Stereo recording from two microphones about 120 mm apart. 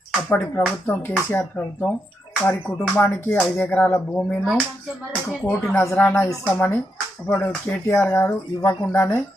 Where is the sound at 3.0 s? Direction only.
20° left (ahead or behind).